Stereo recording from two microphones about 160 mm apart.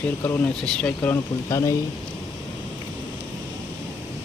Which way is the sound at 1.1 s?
20° left (ahead or behind).